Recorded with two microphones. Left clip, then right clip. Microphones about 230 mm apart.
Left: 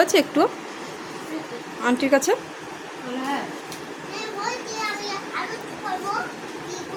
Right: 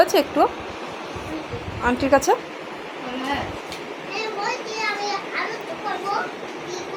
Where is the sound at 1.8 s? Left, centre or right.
Centre.